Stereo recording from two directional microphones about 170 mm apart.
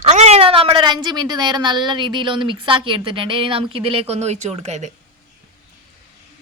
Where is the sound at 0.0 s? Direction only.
40° right (ahead or behind).